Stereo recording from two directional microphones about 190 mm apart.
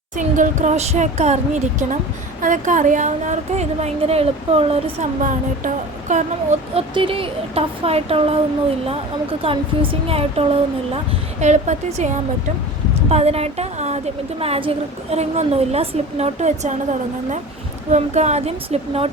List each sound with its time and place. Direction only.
0.2 s a woman's voice: 40° right (ahead or behind)
6.7 s a woman's voice: 30° right (ahead or behind)
9.4 s a woman's voice: 30° right (ahead or behind)
17.9 s a woman's voice: 35° right (ahead or behind)